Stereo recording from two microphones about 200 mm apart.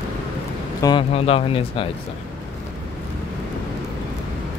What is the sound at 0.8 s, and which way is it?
Speech, 25° left (ahead or behind).